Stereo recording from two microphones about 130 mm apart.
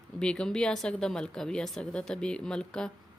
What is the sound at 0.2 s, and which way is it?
Speech, 5° left (ahead or behind).